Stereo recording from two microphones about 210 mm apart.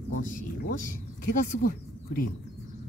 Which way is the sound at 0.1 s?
40° left (ahead or behind).